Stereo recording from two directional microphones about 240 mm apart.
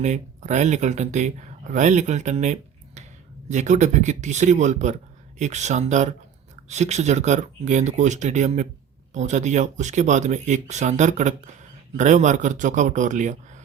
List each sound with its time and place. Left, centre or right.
0.0 s a man's voice: right